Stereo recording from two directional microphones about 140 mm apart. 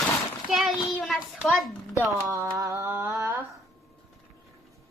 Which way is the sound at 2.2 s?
25° right (ahead or behind).